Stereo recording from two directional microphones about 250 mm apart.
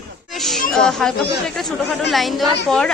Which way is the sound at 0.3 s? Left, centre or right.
Centre.